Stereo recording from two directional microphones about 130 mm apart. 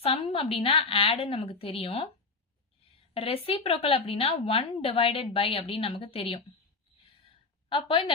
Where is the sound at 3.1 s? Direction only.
45° left (ahead or behind).